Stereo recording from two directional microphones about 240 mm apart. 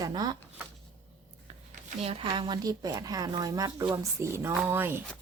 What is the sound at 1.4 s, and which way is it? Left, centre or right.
Speech, right.